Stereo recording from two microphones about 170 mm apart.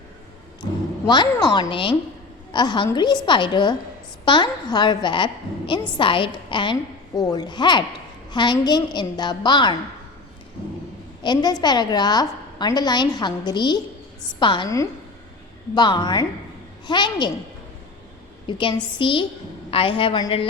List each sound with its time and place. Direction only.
0.6 s a woman's voice: 25° left (ahead or behind)
11.2 s a woman's voice: 25° left (ahead or behind)
18.4 s a woman's voice: 25° left (ahead or behind)